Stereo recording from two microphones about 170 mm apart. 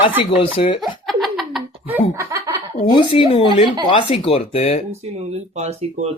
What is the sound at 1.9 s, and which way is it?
Speech, 15° right (ahead or behind).